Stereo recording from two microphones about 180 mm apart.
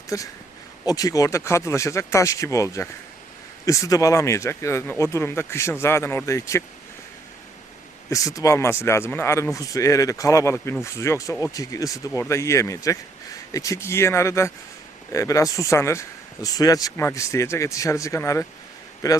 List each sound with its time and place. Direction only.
0.1 s speech: 20° left (ahead or behind)
8.1 s speech: 20° left (ahead or behind)